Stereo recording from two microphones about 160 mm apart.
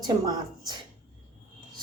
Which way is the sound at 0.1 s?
25° right (ahead or behind).